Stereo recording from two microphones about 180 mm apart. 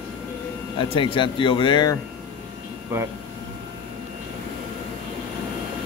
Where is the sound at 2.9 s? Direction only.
15° right (ahead or behind).